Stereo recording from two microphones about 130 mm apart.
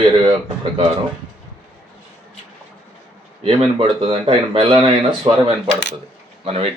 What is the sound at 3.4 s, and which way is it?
A man's voice, 45° right (ahead or behind).